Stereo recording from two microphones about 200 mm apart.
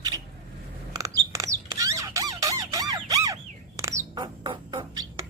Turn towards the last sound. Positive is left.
turn(degrees=-20)  # may be behind; listen again after turning